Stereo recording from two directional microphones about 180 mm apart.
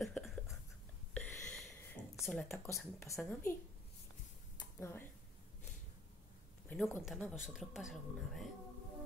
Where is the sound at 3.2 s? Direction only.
10° left (ahead or behind).